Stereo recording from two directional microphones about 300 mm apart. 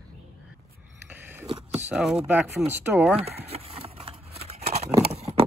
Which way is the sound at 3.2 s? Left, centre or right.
Centre.